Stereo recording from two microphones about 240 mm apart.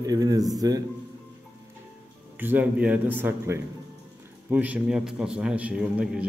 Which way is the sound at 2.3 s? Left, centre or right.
Centre.